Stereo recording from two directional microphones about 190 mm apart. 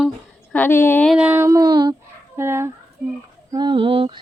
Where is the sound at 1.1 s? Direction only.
10° right (ahead or behind).